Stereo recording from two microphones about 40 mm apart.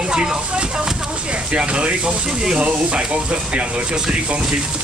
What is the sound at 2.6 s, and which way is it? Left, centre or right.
Speech, right.